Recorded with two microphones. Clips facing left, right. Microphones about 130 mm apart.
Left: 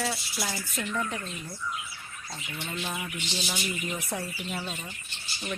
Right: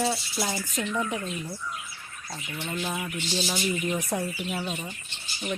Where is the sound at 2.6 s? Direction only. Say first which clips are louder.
Right 4 dB; 15° right (ahead or behind).